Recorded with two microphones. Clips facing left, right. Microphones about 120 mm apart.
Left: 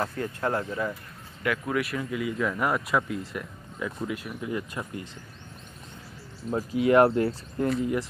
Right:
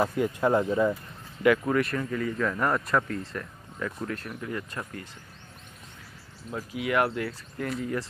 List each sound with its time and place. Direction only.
0.0 s speech: 15° right (ahead or behind)
1.4 s speech: centre (ahead or behind)
6.5 s speech: 35° left (ahead or behind)
7.8 s speech: 15° left (ahead or behind)